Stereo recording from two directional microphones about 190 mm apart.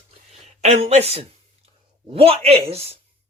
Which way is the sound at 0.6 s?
35° right (ahead or behind).